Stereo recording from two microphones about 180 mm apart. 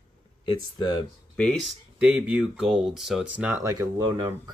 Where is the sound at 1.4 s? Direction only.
Centre (ahead or behind).